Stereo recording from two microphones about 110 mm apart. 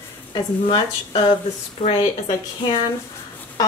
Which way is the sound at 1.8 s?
60° left (ahead or behind).